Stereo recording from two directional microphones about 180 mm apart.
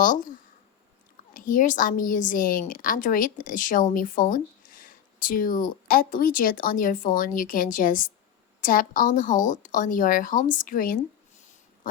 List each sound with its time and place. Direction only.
0.0 s speech: 45° left (ahead or behind)